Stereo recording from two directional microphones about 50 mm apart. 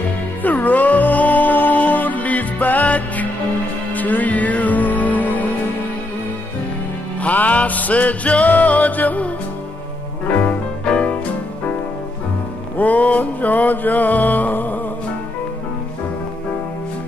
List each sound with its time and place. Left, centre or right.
0.4 s music: left
7.2 s music: left
12.7 s music: left